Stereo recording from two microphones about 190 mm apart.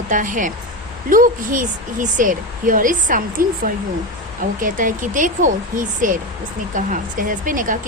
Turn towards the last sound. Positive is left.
turn(degrees=-45)  # may be behind; listen again after turning